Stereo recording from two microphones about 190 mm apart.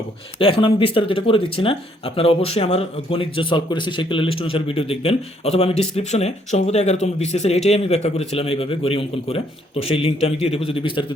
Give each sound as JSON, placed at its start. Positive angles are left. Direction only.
{"t": 0.3, "sound": "speech", "side_deg": 30}